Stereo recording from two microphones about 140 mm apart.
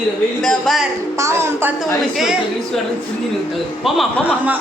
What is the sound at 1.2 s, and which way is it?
Speech, 20° right (ahead or behind).